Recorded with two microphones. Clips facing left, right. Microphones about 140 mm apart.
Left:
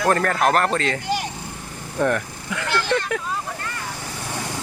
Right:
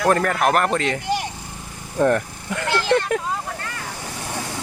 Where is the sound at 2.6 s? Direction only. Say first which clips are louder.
Right 3 dB; 25° right (ahead or behind).